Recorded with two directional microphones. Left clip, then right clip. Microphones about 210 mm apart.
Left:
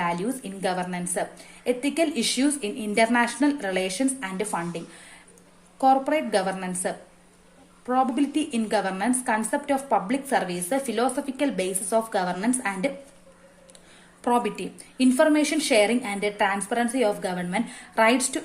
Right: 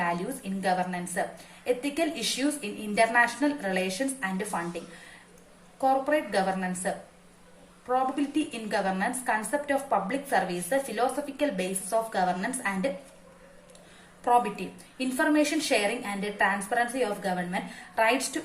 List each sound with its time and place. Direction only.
0.0 s a woman's voice: 50° left (ahead or behind)
5.8 s a woman's voice: 50° left (ahead or behind)
8.4 s a woman's voice: 50° left (ahead or behind)
14.3 s a woman's voice: 50° left (ahead or behind)